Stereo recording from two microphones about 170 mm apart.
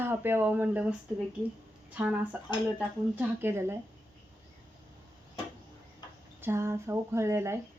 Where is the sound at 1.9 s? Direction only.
10° right (ahead or behind).